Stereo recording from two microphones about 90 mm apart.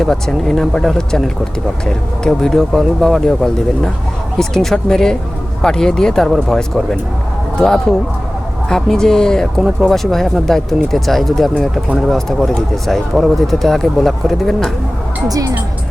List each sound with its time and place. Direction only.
0.0 s speech: 5° left (ahead or behind)
15.3 s speech: 40° right (ahead or behind)